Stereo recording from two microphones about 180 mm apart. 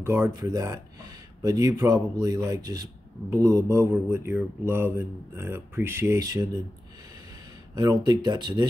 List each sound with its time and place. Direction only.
0.0 s speech: 15° right (ahead or behind)
7.7 s speech: 20° right (ahead or behind)